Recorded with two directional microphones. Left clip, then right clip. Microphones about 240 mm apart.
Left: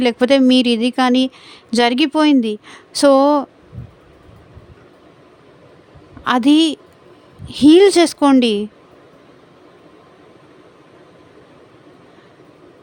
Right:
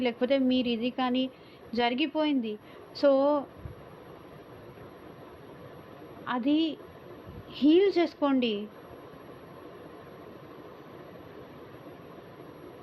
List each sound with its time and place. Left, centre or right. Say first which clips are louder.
0.0 s speech: left 13 dB; left
6.2 s speech: left 15 dB; left